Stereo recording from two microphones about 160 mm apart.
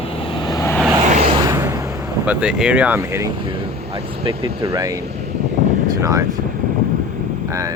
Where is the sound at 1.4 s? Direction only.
20° right (ahead or behind).